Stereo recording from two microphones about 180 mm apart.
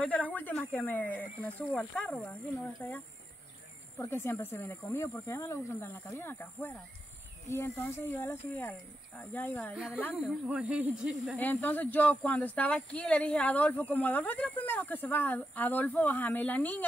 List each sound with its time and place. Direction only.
0.0 s speech: 10° left (ahead or behind)
4.0 s speech: 15° left (ahead or behind)
10.2 s speech: 5° right (ahead or behind)
11.3 s speech: 10° left (ahead or behind)